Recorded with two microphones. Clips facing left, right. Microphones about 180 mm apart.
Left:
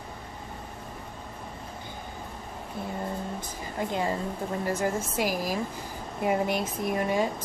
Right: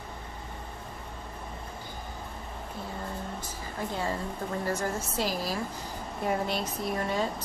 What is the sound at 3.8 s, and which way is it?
Speech, 20° left (ahead or behind).